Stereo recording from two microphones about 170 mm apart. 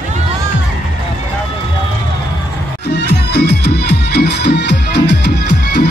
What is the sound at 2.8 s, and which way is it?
Music, 75° left (ahead or behind).